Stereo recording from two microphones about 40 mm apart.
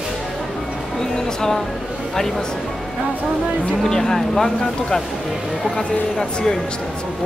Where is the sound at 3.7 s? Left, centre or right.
Centre.